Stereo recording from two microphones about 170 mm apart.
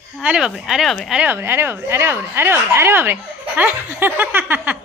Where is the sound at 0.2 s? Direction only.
5° right (ahead or behind).